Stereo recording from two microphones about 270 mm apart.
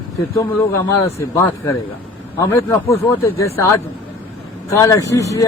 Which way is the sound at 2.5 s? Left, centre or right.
Centre.